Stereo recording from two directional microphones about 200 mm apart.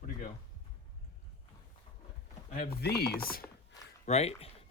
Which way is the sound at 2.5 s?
50° left (ahead or behind).